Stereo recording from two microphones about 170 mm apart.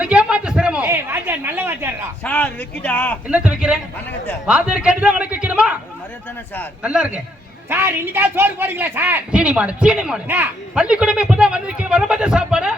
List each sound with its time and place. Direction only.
0.0 s a sound: 5° right (ahead or behind)
2.2 s speech: 10° left (ahead or behind)
3.2 s a man's voice: 5° right (ahead or behind)
6.8 s a man's voice: 5° right (ahead or behind)